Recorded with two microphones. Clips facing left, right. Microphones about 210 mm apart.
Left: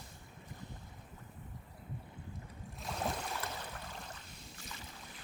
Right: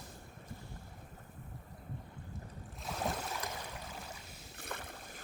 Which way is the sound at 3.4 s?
10° right (ahead or behind).